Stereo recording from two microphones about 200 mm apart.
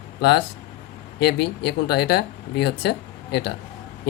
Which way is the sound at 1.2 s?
55° left (ahead or behind).